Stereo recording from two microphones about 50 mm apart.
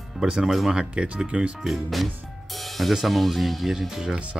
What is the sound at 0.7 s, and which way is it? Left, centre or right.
Speech, right.